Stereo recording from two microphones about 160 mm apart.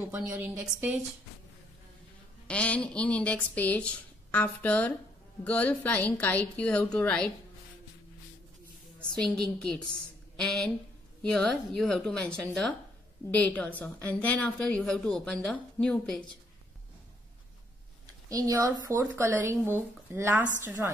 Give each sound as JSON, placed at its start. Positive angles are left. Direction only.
{"t": 0.1, "sound": "a woman's voice", "side_deg": -10}
{"t": 2.4, "sound": "speech", "side_deg": 5}
{"t": 9.1, "sound": "a woman's voice", "side_deg": 5}
{"t": 18.3, "sound": "a woman's voice", "side_deg": -20}